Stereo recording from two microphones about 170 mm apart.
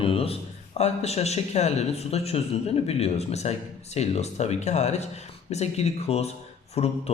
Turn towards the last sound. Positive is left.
turn(degrees=35)  # may be behind; listen again after turning